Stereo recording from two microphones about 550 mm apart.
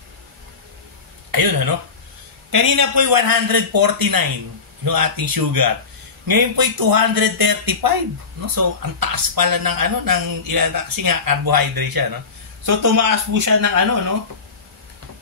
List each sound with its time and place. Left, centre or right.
1.3 s speech: right